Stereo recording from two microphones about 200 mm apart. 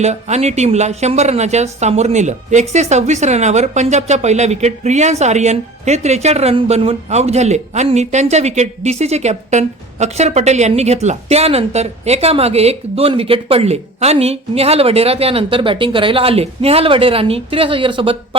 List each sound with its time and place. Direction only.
0.0 s speech: 35° right (ahead or behind)